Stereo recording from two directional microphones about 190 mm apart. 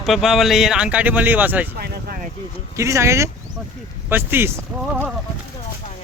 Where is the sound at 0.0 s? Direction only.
Centre (ahead or behind).